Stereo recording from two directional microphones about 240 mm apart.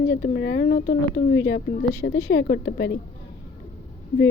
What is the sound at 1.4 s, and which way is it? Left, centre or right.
A woman's voice, left.